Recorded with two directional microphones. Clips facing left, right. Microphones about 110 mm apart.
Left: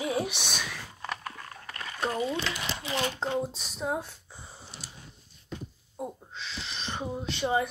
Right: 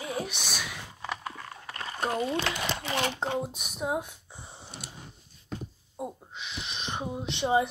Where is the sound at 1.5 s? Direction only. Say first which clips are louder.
Right 2 dB; 25° right (ahead or behind).